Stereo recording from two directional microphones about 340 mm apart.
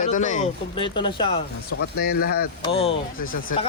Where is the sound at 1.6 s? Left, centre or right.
Left.